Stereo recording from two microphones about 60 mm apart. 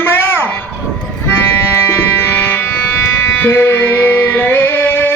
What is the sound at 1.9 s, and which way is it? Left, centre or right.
Music, left.